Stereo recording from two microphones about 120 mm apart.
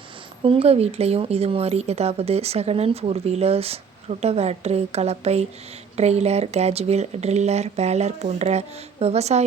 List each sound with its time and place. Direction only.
0.4 s speech: 55° right (ahead or behind)